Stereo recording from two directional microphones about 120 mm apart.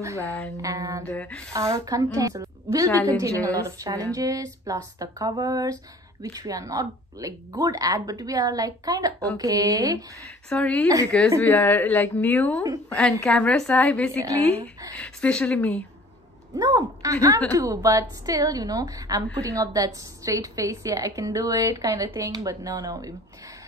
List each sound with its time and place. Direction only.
0.6 s a woman's voice: 30° right (ahead or behind)
1.0 s a woman's voice: 10° left (ahead or behind)
1.5 s a woman's voice: 25° right (ahead or behind)
10.5 s a woman's voice: 10° left (ahead or behind)
14.2 s a woman's voice: 30° right (ahead or behind)
15.0 s a woman's voice: 5° left (ahead or behind)
16.5 s a woman's voice: 30° right (ahead or behind)